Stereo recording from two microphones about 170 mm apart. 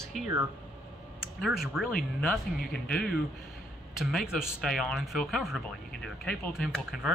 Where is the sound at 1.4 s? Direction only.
Centre (ahead or behind).